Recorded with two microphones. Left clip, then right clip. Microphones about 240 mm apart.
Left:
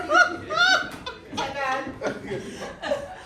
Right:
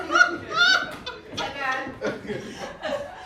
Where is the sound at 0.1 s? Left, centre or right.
Centre.